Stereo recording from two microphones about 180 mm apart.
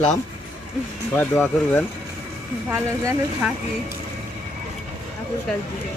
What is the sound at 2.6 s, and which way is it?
Speech, 10° right (ahead or behind).